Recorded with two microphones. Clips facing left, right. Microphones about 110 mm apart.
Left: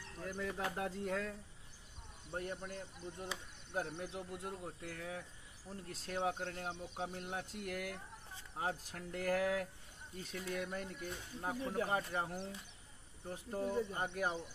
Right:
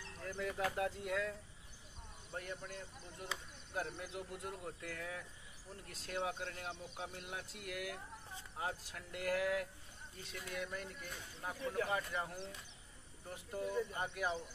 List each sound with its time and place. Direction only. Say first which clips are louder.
0.4 s speech: right 2 dB; 25° left (ahead or behind)
2.3 s speech: left 3 dB; 30° left (ahead or behind)